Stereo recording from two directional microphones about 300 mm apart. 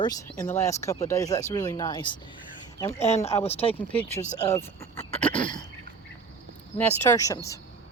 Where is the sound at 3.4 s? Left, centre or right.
Centre.